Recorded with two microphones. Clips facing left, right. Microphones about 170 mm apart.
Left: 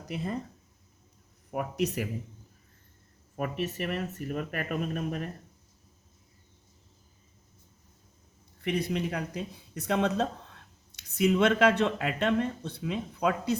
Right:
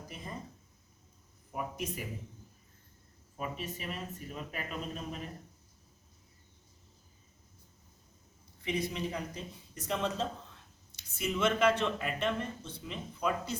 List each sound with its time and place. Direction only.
0.0 s speech: 70° left (ahead or behind)
1.5 s speech: 70° left (ahead or behind)
3.3 s speech: 65° left (ahead or behind)
8.6 s speech: 60° left (ahead or behind)